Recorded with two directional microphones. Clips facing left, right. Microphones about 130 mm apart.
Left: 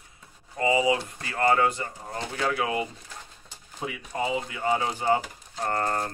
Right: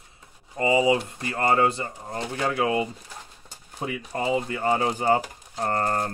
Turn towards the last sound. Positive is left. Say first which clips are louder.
# right 2 dB
turn(degrees=-35)  # may be behind; listen again after turning